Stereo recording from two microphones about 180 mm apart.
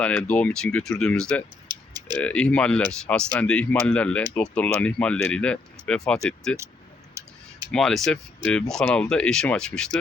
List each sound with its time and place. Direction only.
0.0 s speech: 5° left (ahead or behind)
1.7 s typing: 25° right (ahead or behind)
2.1 s speech: 5° left (ahead or behind)
7.1 s tick: 15° right (ahead or behind)
7.7 s speech: 5° left (ahead or behind)